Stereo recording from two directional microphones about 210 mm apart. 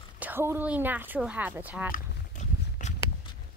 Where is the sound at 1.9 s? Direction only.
35° left (ahead or behind).